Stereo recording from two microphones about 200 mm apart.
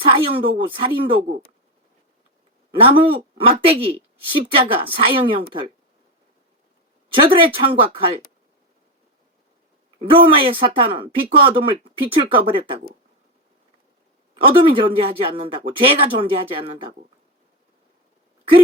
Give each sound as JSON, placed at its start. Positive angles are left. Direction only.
{"t": 0.0, "sound": "speech", "side_deg": -25}
{"t": 2.8, "sound": "speech", "side_deg": -25}
{"t": 7.1, "sound": "speech", "side_deg": -25}
{"t": 10.0, "sound": "speech", "side_deg": -25}
{"t": 14.3, "sound": "speech", "side_deg": -25}